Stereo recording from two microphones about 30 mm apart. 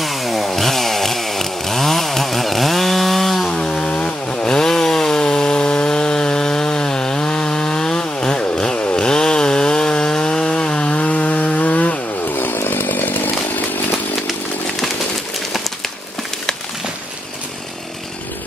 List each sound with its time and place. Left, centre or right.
0.0 s chainsaw: centre
0.5 s chainsaw: centre
3.6 s chainsaw: left
4.0 s chainsaw: left
4.5 s chainsaw: left
11.0 s chainsaw: left
12.4 s chainsaw: left